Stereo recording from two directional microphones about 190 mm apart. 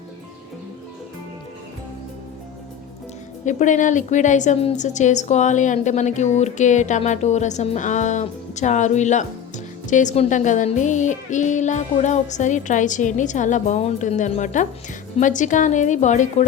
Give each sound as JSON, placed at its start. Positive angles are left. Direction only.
{"t": 3.4, "sound": "a woman's voice", "side_deg": 40}